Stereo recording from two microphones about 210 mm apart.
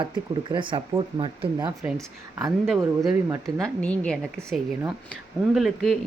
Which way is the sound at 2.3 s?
5° right (ahead or behind).